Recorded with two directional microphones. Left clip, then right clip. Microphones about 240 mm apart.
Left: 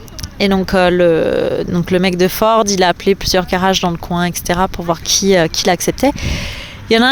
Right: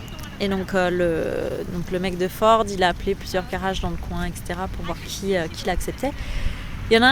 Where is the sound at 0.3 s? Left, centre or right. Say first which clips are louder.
Left 9 dB; left.